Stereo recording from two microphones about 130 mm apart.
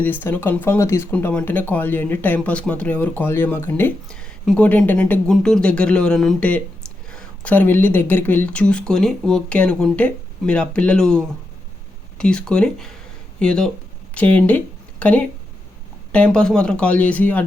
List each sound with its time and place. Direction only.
0.0 s speech: 15° left (ahead or behind)
1.1 s speech: 10° left (ahead or behind)